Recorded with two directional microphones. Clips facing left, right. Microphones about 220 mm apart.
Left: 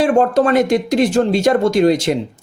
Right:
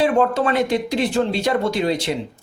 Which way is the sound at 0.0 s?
45° left (ahead or behind).